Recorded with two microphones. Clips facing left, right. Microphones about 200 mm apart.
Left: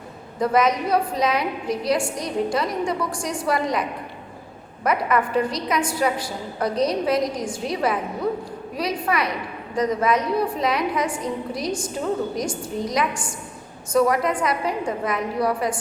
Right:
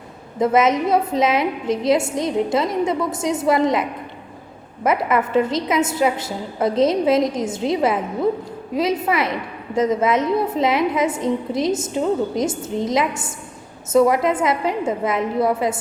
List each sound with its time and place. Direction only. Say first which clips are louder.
0.3 s a woman's voice: right 3 dB; 25° right (ahead or behind)